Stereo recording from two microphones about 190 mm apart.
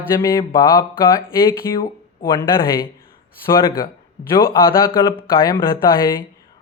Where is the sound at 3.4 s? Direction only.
15° left (ahead or behind).